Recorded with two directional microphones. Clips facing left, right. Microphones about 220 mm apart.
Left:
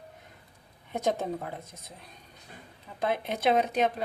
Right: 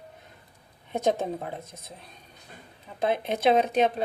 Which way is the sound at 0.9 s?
20° right (ahead or behind).